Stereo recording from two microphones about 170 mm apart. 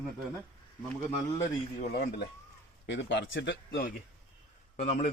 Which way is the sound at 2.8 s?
90° left.